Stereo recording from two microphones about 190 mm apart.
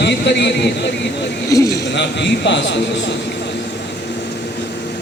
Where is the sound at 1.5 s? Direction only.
15° left (ahead or behind).